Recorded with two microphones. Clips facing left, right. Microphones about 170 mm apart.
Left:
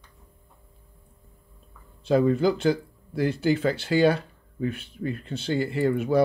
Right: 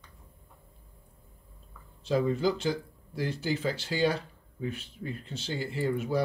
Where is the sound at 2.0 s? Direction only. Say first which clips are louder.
Left 6 dB; 60° left (ahead or behind).